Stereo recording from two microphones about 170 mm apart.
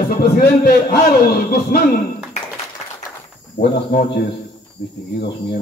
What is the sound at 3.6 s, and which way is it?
Speech, 25° left (ahead or behind).